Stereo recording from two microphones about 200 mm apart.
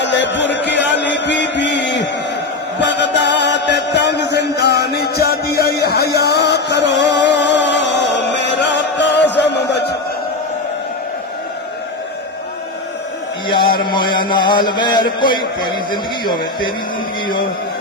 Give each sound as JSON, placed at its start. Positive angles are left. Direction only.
{"t": 0.0, "sound": "music", "side_deg": 60}
{"t": 13.5, "sound": "a man's voice", "side_deg": 25}